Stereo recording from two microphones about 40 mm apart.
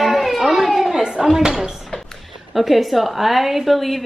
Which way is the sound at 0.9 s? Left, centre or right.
Centre.